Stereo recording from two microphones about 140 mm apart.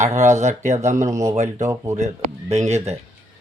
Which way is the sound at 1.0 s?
20° right (ahead or behind).